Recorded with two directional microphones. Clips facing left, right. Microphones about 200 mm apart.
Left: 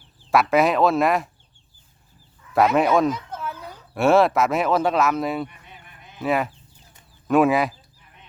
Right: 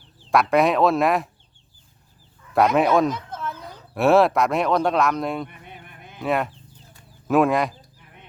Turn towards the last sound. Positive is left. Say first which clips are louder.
# left 1 dB
turn(degrees=5)  # may be behind; listen again after turning